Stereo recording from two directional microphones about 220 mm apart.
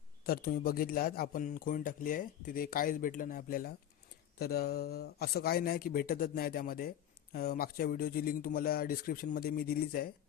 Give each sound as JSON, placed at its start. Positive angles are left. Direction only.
{"t": 0.3, "sound": "speech", "side_deg": 40}